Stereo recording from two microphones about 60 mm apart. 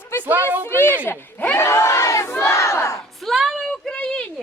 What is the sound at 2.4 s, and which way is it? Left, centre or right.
Battle cry, left.